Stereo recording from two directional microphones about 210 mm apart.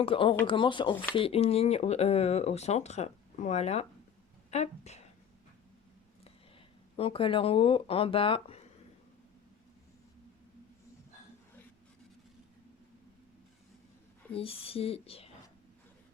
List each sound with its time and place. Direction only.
0.0 s speech: 25° left (ahead or behind)
6.9 s speech: 25° left (ahead or behind)
14.3 s speech: 25° left (ahead or behind)